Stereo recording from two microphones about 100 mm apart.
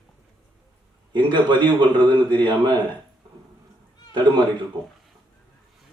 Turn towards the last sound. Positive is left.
turn(degrees=-50)  # may be behind; listen again after turning